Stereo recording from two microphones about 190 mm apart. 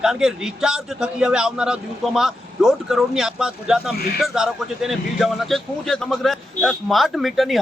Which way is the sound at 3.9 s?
55° left (ahead or behind).